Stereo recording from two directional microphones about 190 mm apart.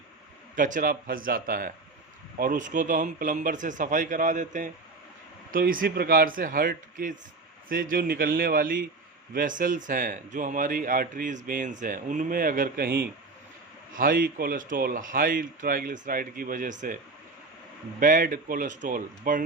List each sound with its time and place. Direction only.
0.5 s speech: 45° right (ahead or behind)
18.0 s speech: 45° right (ahead or behind)